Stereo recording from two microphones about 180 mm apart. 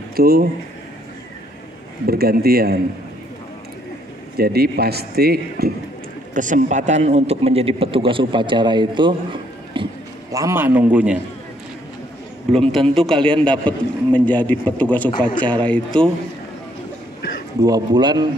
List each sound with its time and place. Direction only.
0.1 s speech: 55° right (ahead or behind)
2.0 s speech: 60° right (ahead or behind)
4.4 s speech: 60° right (ahead or behind)
6.3 s a man's voice: 45° right (ahead or behind); by 9.8 s 25° right (ahead or behind)
10.3 s a man's voice: 15° right (ahead or behind)
12.5 s a man's voice: centre (ahead or behind)
15.0 s a man's voice: 25° left (ahead or behind)
15.4 s speech: 5° left (ahead or behind)
17.6 s speech: 20° right (ahead or behind)